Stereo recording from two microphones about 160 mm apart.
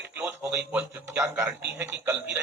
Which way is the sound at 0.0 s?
10° right (ahead or behind).